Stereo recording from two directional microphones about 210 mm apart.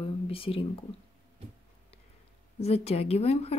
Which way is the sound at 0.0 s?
25° left (ahead or behind).